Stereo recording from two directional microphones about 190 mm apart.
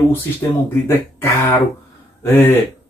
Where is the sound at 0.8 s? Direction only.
10° left (ahead or behind).